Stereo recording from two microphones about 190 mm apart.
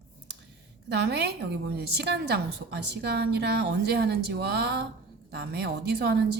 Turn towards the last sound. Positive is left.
turn(degrees=-60)  # may be behind; listen again after turning